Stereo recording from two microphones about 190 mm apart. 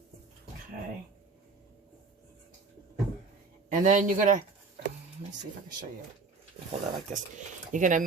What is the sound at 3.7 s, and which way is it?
Speech, 45° right (ahead or behind).